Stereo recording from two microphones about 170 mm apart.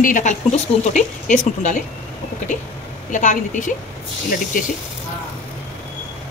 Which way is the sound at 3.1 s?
45° left (ahead or behind).